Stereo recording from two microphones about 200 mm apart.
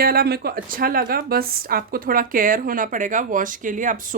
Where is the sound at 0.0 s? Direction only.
50° right (ahead or behind).